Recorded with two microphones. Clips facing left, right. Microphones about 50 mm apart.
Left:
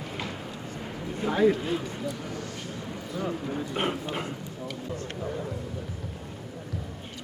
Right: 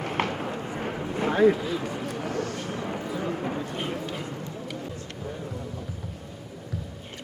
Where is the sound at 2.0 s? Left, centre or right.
Right.